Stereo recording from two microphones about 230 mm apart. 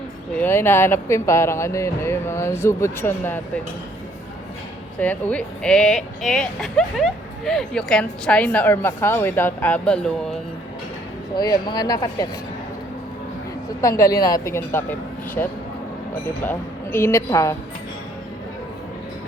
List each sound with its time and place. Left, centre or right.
0.3 s speech: centre
4.9 s speech: centre
11.3 s speech: centre
13.8 s speech: centre